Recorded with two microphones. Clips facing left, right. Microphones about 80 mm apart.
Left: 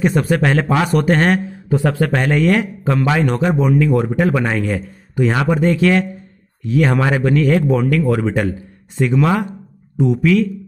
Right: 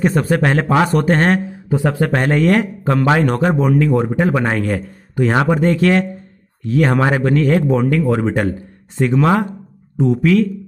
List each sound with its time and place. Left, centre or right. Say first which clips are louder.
0.0 s speech: even; right
1.7 s speech: even; centre
2.1 s a man's voice: right 2 dB; right
3.9 s speech: even; right
4.6 s a man's voice: right 1 dB; right
7.7 s speech: even; right
8.3 s speech: right 1 dB; right